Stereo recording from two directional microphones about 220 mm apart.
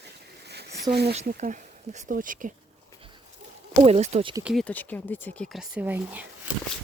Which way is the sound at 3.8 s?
30° right (ahead or behind).